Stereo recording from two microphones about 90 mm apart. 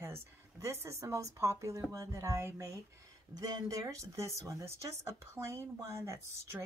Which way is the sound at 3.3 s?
45° right (ahead or behind).